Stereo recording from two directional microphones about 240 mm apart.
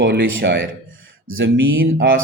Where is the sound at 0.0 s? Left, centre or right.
Right.